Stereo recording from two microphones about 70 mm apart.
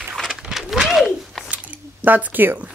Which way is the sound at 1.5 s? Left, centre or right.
Right.